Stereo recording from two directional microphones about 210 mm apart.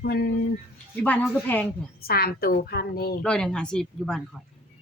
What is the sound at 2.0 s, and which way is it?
Speech, 45° left (ahead or behind).